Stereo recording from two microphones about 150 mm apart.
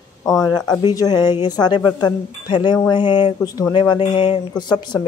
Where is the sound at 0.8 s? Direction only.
25° left (ahead or behind).